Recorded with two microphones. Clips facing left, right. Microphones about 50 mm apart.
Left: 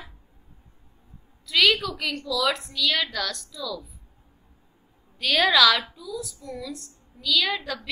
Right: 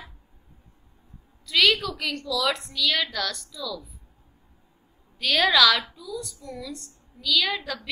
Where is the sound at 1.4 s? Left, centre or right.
Centre.